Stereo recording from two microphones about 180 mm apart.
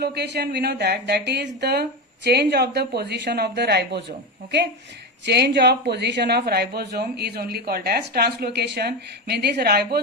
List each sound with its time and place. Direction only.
0.0 s a woman's voice: 65° right (ahead or behind)
5.2 s a woman's voice: 65° right (ahead or behind)